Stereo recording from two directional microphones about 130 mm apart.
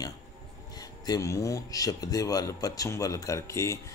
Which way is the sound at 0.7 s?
30° left (ahead or behind).